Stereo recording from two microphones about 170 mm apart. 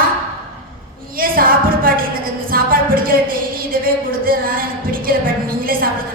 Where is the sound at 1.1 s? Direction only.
55° right (ahead or behind).